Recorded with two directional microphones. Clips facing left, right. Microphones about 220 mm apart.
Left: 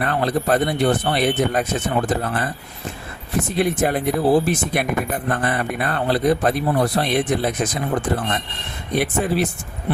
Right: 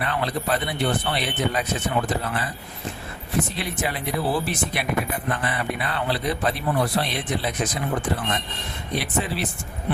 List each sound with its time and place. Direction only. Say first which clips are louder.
0.0 s speech: left 5 dB; 45° left (ahead or behind)
3.6 s speech: left 9 dB; 50° left (ahead or behind)
9.0 s speech: left 7 dB; 45° left (ahead or behind)